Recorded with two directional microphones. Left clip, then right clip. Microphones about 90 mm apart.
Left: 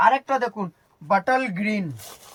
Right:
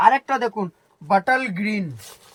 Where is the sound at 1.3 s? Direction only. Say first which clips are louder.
Right 1 dB; 5° right (ahead or behind).